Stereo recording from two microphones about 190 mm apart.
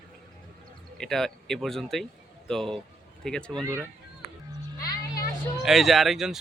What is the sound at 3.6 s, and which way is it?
Speech, 15° right (ahead or behind).